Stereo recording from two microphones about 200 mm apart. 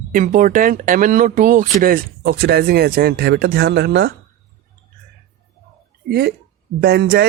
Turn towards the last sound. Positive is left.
turn(degrees=-55)  # may be behind; listen again after turning